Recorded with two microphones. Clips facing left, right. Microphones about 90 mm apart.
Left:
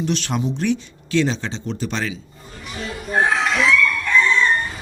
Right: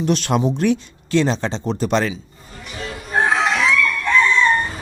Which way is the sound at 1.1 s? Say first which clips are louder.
Right 2 dB; 40° right (ahead or behind).